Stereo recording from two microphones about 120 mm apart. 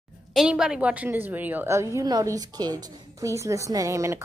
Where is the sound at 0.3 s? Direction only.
5° right (ahead or behind); by 1.9 s 20° right (ahead or behind).